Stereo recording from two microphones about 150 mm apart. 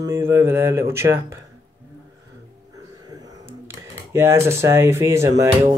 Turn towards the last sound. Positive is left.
turn(degrees=-20)  # may be behind; listen again after turning